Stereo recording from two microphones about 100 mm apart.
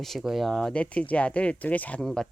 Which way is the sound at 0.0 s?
Centre (ahead or behind).